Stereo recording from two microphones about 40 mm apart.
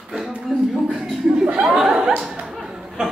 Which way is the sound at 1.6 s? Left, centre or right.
Centre.